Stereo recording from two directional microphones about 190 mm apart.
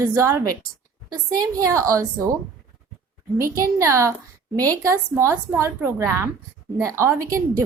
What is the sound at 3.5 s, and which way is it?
A woman's voice, 15° right (ahead or behind).